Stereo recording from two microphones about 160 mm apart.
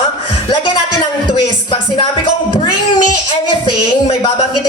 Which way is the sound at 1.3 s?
30° left (ahead or behind).